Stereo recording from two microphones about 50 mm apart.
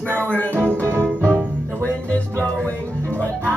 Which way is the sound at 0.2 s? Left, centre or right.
Left.